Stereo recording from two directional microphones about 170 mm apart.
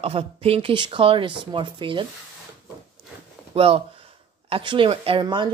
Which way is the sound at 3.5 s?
35° right (ahead or behind).